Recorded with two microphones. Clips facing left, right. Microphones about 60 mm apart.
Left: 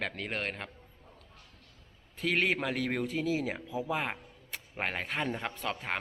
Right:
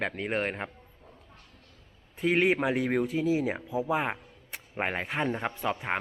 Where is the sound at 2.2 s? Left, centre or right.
Centre.